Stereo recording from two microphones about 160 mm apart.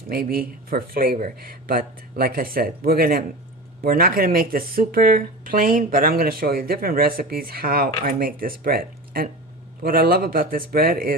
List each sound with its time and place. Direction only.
0.1 s speech: 70° right (ahead or behind)